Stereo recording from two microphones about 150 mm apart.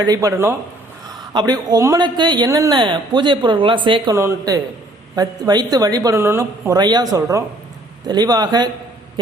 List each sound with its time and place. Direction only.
0.0 s speech: 25° right (ahead or behind)
4.1 s speech: 20° right (ahead or behind)
6.7 s speech: 30° right (ahead or behind)